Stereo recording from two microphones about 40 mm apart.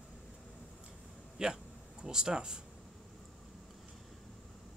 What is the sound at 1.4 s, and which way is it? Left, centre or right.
Speech, right.